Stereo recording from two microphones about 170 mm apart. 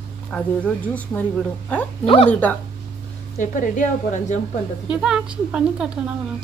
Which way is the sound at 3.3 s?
50° left (ahead or behind).